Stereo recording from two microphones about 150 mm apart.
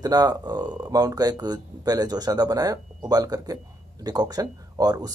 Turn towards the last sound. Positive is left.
turn(degrees=-25)  # may be behind; listen again after turning